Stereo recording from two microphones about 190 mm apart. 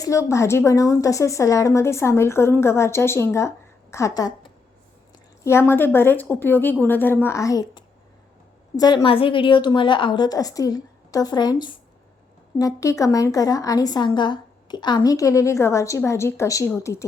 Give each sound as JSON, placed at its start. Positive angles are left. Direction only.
{"t": 0.0, "sound": "a woman's voice", "side_deg": 15}
{"t": 5.4, "sound": "a woman's voice", "side_deg": 15}
{"t": 12.5, "sound": "a woman's voice", "side_deg": 15}